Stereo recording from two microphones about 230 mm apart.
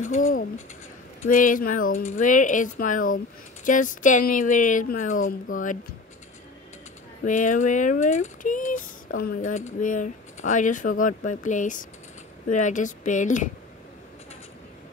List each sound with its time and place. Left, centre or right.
1.2 s speech: left
7.2 s speech: left